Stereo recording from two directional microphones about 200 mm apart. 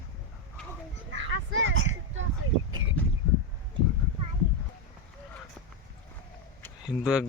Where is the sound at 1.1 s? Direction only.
70° right (ahead or behind).